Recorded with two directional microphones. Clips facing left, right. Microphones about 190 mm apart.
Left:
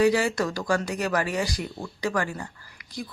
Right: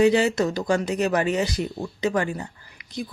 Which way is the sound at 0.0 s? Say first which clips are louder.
Right 3 dB; 25° right (ahead or behind).